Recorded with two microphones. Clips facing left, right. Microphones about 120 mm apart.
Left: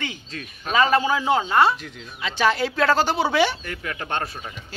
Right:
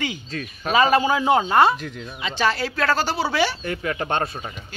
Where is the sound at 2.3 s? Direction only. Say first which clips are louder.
Left 2 dB; 15° left (ahead or behind).